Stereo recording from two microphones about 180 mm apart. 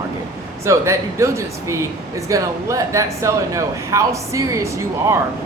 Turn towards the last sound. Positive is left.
turn(degrees=-15)  # may be behind; listen again after turning